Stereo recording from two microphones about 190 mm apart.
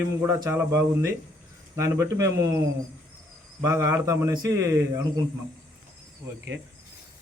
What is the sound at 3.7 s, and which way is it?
A man's voice, 15° right (ahead or behind).